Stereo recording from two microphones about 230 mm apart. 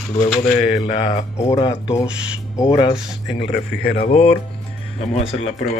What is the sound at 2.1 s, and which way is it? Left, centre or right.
Speech, centre.